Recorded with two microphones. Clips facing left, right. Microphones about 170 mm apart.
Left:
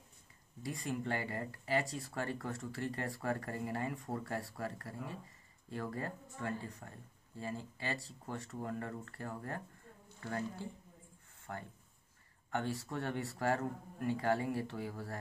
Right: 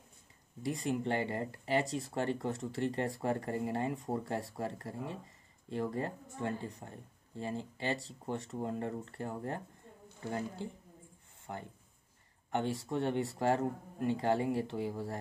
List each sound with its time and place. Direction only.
0.6 s speech: 20° right (ahead or behind)
9.9 s a sound: 25° right (ahead or behind)
10.2 s speech: 20° right (ahead or behind)